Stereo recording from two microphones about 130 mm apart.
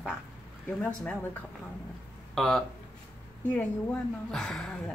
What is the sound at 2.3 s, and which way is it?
Speech, centre (ahead or behind).